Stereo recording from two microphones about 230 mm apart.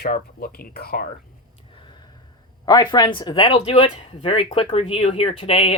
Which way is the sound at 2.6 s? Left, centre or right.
Centre.